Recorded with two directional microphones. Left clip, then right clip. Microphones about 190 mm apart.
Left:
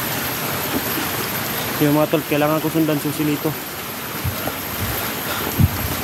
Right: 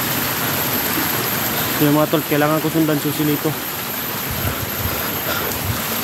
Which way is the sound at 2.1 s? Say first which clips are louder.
Right 1 dB; 5° left (ahead or behind).